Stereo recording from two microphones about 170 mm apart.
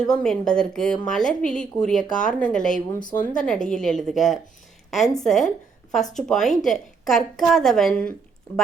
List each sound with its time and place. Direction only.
0.0 s a woman's voice: 5° left (ahead or behind)
3.0 s speech: 50° left (ahead or behind)
3.3 s a woman's voice: 5° left (ahead or behind)